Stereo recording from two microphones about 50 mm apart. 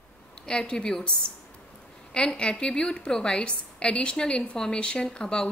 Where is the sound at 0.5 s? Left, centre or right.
Centre.